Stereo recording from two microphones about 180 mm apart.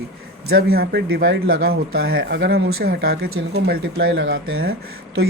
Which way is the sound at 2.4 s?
90° right.